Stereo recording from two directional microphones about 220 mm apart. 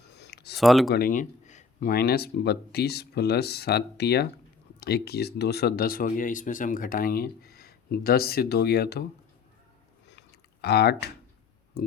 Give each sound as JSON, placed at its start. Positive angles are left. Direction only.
{"t": 0.2, "sound": "a sound", "side_deg": 50}
{"t": 0.5, "sound": "speech", "side_deg": 0}
{"t": 0.9, "sound": "speech", "side_deg": 45}
{"t": 10.1, "sound": "chewing", "side_deg": 50}
{"t": 11.8, "sound": "clicking", "side_deg": 45}